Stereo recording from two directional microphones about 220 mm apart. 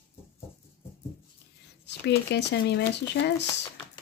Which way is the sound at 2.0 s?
50° left (ahead or behind).